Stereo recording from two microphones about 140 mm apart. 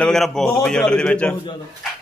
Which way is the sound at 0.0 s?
5° left (ahead or behind).